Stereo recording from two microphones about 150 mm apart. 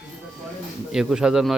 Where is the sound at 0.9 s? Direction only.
5° right (ahead or behind).